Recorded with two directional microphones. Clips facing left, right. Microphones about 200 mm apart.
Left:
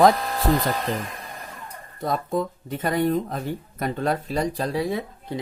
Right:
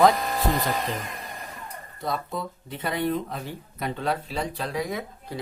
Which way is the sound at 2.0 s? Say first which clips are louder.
Left 5 dB; 45° left (ahead or behind).